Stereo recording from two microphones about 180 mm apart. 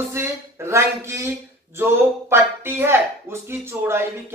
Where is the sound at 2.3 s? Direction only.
10° right (ahead or behind).